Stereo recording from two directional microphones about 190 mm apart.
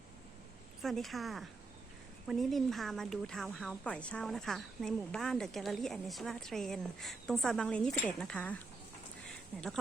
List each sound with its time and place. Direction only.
0.8 s a woman's voice: centre (ahead or behind)